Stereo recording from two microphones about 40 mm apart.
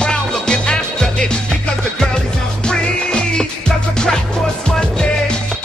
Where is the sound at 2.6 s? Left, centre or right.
Centre.